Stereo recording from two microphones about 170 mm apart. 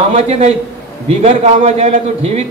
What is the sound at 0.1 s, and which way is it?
A man's voice, 40° right (ahead or behind).